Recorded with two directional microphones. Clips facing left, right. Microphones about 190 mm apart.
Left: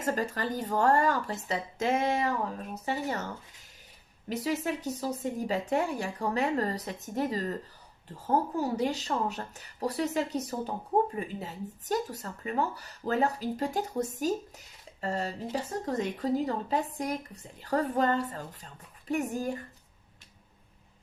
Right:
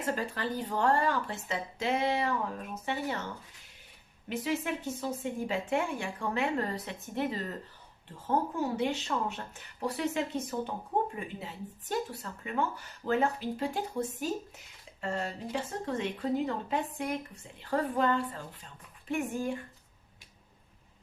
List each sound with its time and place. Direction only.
0.0 s speech: 40° left (ahead or behind)
4.3 s speech: 40° left (ahead or behind)